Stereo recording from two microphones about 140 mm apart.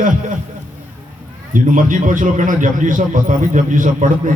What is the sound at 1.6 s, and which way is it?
A man's voice, 70° right (ahead or behind).